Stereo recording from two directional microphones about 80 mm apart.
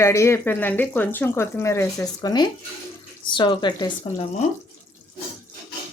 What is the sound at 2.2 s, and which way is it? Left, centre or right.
Speech, left.